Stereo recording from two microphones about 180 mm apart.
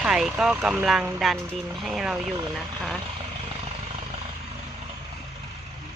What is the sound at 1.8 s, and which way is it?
Speech, centre (ahead or behind).